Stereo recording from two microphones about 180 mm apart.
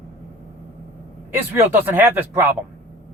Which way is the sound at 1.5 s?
10° right (ahead or behind).